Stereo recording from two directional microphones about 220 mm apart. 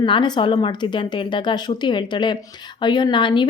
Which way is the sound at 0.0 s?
20° left (ahead or behind).